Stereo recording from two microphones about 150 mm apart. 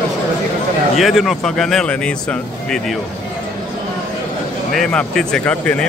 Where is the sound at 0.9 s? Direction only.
Centre (ahead or behind).